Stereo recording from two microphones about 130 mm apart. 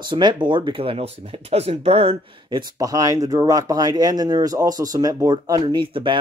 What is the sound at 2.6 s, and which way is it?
Speech, 30° right (ahead or behind).